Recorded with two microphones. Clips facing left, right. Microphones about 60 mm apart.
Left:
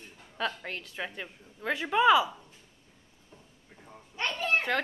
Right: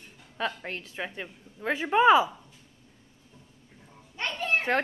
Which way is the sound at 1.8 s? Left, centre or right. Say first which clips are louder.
Right 3 dB; right.